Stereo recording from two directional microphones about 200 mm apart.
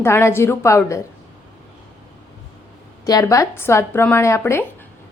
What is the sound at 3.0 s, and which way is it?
A woman's voice, 15° left (ahead or behind).